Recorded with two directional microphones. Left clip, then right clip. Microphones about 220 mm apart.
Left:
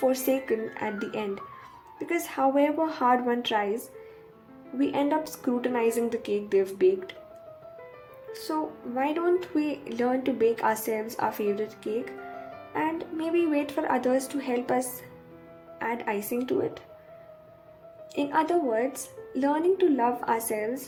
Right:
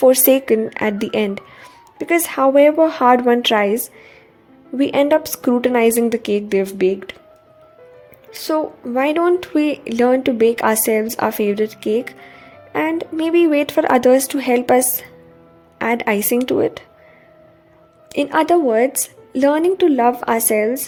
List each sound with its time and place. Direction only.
0.0 s speech: 45° right (ahead or behind)
4.8 s speech: 45° right (ahead or behind)
8.3 s speech: 45° right (ahead or behind)
18.1 s speech: 45° right (ahead or behind)